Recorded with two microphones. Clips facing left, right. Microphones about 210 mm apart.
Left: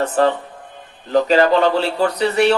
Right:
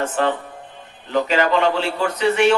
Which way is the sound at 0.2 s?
40° left (ahead or behind).